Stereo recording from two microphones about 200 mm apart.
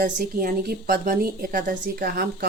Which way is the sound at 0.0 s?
50° right (ahead or behind).